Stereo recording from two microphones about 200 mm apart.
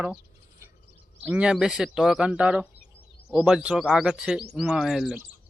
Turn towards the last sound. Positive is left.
turn(degrees=0)  # may be behind; listen again after turning